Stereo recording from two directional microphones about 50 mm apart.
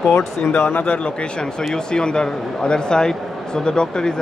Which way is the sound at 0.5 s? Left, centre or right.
Left.